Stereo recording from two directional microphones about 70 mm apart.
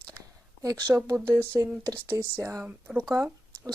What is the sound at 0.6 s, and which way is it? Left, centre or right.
Speech, right.